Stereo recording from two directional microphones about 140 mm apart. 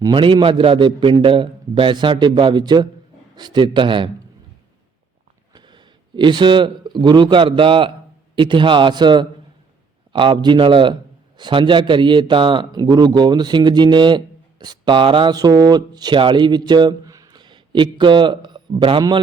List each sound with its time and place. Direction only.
0.0 s a man's voice: 35° right (ahead or behind)
5.5 s a man's voice: 35° right (ahead or behind)